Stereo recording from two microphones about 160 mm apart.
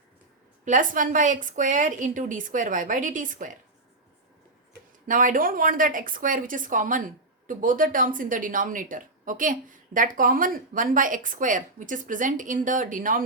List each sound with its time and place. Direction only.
0.6 s a woman's voice: 55° right (ahead or behind)
5.0 s a woman's voice: 55° right (ahead or behind)